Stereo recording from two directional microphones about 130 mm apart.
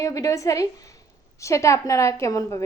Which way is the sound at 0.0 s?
25° left (ahead or behind).